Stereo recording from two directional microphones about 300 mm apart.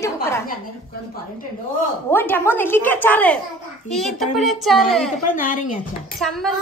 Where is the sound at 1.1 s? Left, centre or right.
Left.